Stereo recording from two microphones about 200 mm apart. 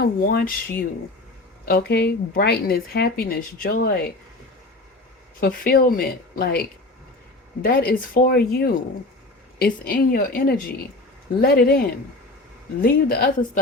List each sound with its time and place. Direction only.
0.0 s speech: 50° left (ahead or behind)
5.4 s speech: 45° left (ahead or behind)
12.8 s speech: 50° left (ahead or behind)